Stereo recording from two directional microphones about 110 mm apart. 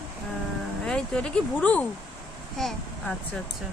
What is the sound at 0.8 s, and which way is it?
A child's voice, 5° left (ahead or behind).